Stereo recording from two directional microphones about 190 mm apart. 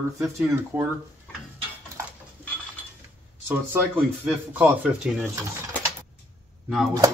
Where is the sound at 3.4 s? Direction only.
10° right (ahead or behind).